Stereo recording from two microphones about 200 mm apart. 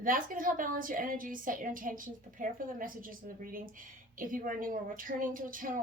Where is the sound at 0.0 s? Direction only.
45° right (ahead or behind).